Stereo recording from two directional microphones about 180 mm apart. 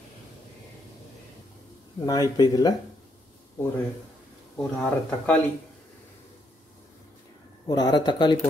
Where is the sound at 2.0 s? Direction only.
20° left (ahead or behind).